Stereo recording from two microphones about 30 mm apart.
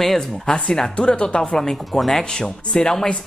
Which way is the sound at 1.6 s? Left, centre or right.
Centre.